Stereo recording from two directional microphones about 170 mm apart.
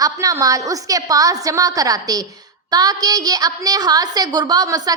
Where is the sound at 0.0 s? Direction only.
20° right (ahead or behind).